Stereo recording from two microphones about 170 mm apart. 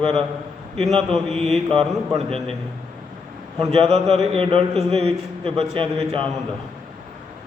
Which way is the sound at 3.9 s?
35° right (ahead or behind).